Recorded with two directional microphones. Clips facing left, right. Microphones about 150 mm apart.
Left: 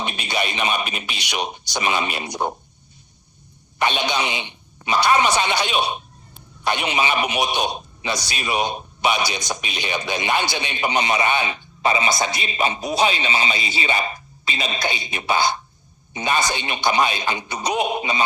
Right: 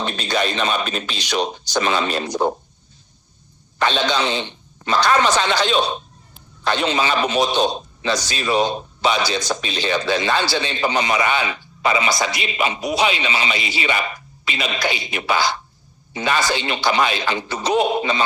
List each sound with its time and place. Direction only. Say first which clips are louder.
0.0 s a man's voice: right 4 dB; 10° left (ahead or behind)
3.8 s a man's voice: right 2 dB; 15° left (ahead or behind)
12.6 s a man's voice: even; 35° left (ahead or behind)
16.1 s a man's voice: right 2 dB; 20° left (ahead or behind)